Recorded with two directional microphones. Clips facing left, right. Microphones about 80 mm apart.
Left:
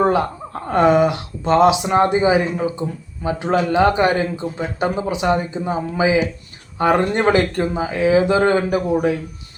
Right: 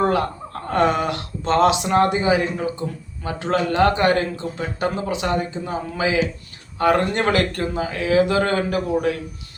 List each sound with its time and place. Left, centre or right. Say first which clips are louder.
0.0 s a man's voice: left 3 dB; centre